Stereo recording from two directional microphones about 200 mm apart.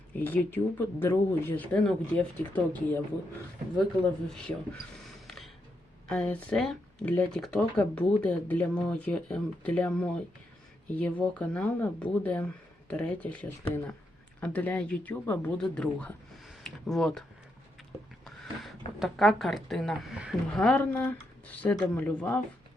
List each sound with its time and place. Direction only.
0.1 s speech: 10° left (ahead or behind)
13.6 s speech: 30° left (ahead or behind)
14.4 s speech: 5° left (ahead or behind)
18.9 s speech: centre (ahead or behind)